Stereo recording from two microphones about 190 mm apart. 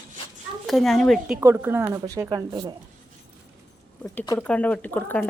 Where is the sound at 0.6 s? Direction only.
Centre (ahead or behind).